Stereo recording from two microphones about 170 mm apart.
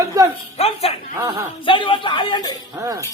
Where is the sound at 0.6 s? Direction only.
35° left (ahead or behind).